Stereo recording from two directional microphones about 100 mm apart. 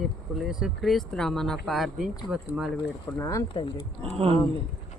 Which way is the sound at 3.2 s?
30° left (ahead or behind).